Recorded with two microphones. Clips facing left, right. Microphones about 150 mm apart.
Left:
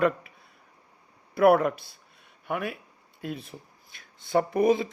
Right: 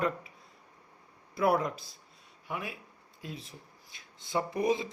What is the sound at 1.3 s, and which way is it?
Speech, 65° left (ahead or behind).